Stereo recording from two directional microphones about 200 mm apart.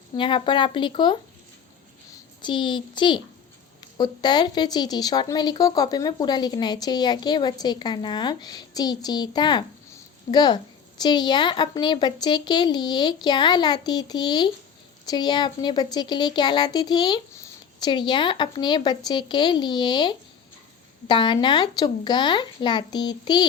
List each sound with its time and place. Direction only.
0.2 s a woman's voice: 25° left (ahead or behind)
2.4 s a woman's voice: 25° left (ahead or behind)